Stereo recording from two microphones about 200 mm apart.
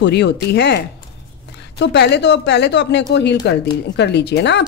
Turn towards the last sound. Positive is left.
turn(degrees=60)  # may be behind; listen again after turning